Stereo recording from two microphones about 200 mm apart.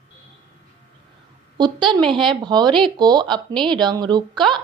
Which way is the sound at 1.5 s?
25° right (ahead or behind).